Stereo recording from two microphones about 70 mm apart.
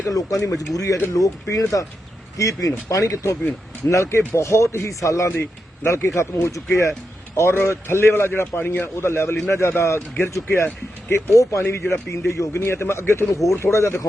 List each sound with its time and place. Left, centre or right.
0.0 s speech: left
5.4 s speech: left
9.0 s speech: left